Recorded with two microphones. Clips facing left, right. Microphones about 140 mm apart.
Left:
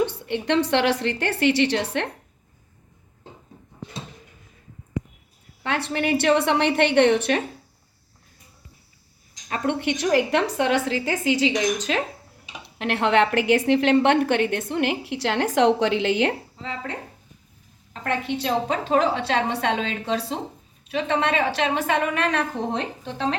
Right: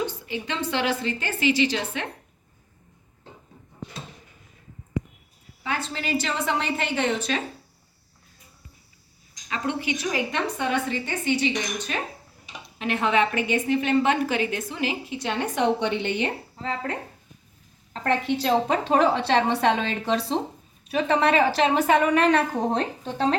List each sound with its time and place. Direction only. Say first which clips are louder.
0.0 s a woman's voice: left 5 dB; 65° left (ahead or behind)
5.6 s a woman's voice: left 5 dB; 70° left (ahead or behind)
9.5 s a woman's voice: left 4 dB; 55° left (ahead or behind)
10.0 s a woman's voice: left 6 dB; 70° left (ahead or behind); by 12.0 s 90° left
12.6 s a woman's voice: left 2 dB; 70° left (ahead or behind); by 16.3 s 90° left
16.6 s speech: right 3 dB; 45° right (ahead or behind)
18.0 s a woman's voice: right 2 dB; 35° right (ahead or behind)